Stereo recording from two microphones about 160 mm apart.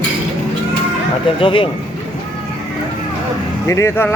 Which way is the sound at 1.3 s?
35° left (ahead or behind).